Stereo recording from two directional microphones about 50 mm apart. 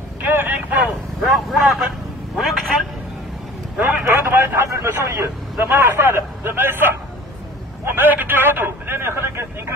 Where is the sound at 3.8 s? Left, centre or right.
Right.